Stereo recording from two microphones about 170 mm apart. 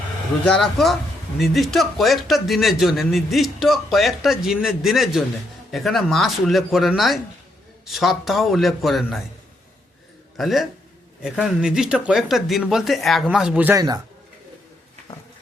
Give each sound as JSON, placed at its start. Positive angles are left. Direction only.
{"t": 0.4, "sound": "a man's voice", "side_deg": 5}
{"t": 10.3, "sound": "a man's voice", "side_deg": 0}
{"t": 13.7, "sound": "speech", "side_deg": -20}